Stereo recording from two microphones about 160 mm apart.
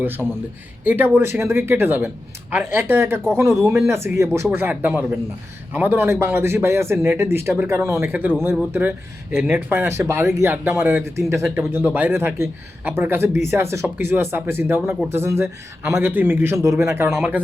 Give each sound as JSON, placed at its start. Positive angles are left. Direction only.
{"t": 0.0, "sound": "a man's voice", "side_deg": -15}